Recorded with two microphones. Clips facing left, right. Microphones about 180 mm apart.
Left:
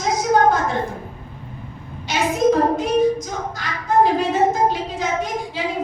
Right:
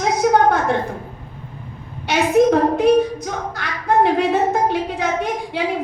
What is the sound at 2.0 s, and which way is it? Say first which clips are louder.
A woman's voice: right 3 dB; 60° right (ahead or behind).